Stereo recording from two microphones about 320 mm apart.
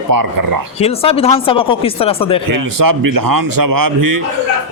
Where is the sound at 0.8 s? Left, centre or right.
Centre.